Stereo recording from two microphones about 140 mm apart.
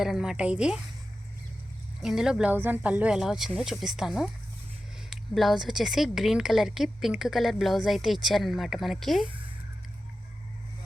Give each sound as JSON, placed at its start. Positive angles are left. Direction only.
{"t": 0.0, "sound": "speech", "side_deg": -5}
{"t": 2.0, "sound": "speech", "side_deg": -5}